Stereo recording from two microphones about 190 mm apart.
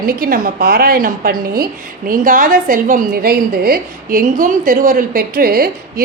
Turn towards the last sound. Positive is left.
turn(degrees=-50)  # may be behind; listen again after turning